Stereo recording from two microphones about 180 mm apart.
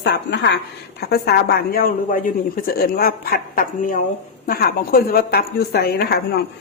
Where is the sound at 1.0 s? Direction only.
60° left (ahead or behind).